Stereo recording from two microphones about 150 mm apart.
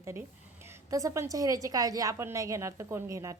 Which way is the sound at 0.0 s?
15° right (ahead or behind).